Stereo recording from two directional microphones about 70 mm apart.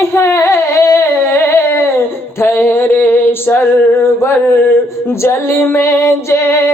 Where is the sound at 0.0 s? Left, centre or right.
Left.